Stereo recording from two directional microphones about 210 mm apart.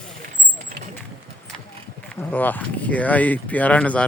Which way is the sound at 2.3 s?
10° left (ahead or behind).